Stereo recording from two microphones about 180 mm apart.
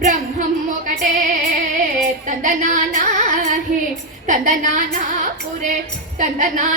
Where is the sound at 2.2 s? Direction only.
45° right (ahead or behind).